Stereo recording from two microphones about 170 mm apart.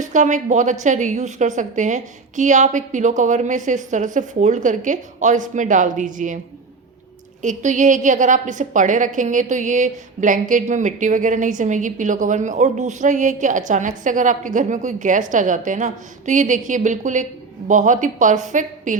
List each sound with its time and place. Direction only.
0.0 s a woman's voice: 45° right (ahead or behind)
7.4 s a woman's voice: 45° right (ahead or behind)